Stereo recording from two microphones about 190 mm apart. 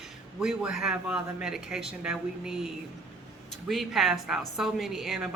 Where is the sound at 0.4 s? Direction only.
Centre (ahead or behind).